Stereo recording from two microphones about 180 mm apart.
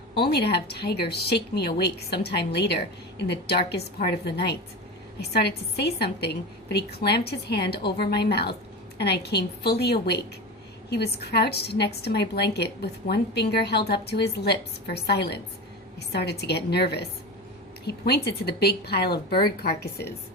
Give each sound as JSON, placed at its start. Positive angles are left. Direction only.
{"t": 0.1, "sound": "a woman's voice", "side_deg": 65}